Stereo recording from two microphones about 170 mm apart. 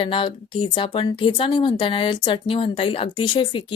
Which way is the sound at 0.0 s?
30° left (ahead or behind).